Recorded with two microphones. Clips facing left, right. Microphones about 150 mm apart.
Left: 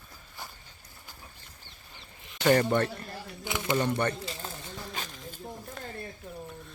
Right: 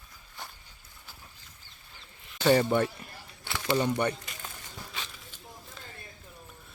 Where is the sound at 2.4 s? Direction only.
10° right (ahead or behind).